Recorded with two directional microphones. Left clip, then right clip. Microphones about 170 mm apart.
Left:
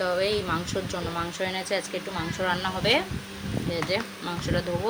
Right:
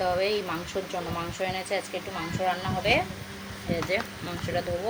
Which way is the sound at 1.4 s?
35° left (ahead or behind).